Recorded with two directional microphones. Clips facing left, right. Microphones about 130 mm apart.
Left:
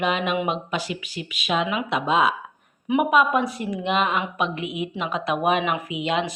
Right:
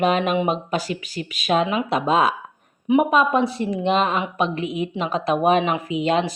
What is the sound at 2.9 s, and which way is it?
A woman's voice, 25° right (ahead or behind).